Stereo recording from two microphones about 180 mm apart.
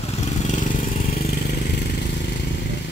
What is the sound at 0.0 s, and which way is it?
Vehicle, 35° left (ahead or behind).